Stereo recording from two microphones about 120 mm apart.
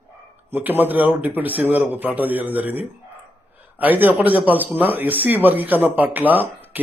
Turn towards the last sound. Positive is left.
turn(degrees=-15)  # may be behind; listen again after turning